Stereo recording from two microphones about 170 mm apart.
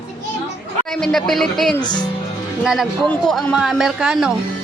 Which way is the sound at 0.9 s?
5° left (ahead or behind).